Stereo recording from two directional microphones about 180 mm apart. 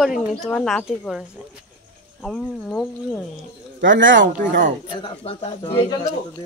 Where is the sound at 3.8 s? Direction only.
90° right.